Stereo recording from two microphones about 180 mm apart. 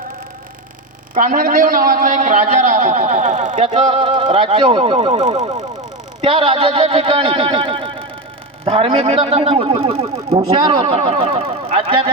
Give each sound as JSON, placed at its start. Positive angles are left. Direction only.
{"t": 1.1, "sound": "a man's voice", "side_deg": -45}
{"t": 5.5, "sound": "a sound", "side_deg": -20}
{"t": 6.2, "sound": "speech", "side_deg": -30}